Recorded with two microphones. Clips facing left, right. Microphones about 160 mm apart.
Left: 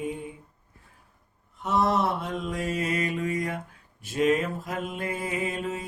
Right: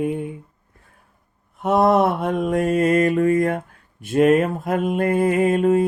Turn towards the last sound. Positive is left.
turn(degrees=-55)  # may be behind; listen again after turning